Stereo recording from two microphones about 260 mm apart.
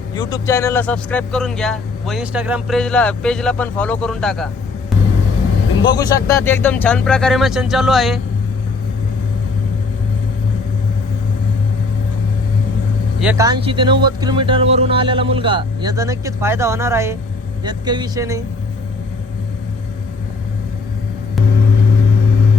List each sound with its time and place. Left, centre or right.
0.1 s speech: centre
5.8 s speech: centre
13.1 s speech: centre